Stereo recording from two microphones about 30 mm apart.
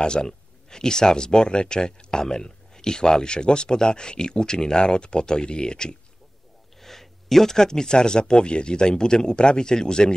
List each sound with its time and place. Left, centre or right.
0.0 s speech: left
6.8 s speech: centre; by 10.1 s left